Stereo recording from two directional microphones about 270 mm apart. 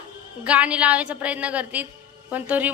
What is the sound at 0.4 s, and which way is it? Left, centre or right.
A woman's voice, centre.